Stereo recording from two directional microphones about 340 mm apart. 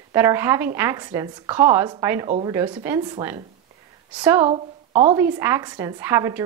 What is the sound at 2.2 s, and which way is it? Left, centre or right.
Speech, centre.